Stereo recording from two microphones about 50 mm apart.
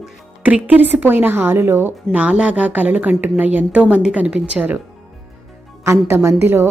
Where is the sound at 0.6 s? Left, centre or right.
Right.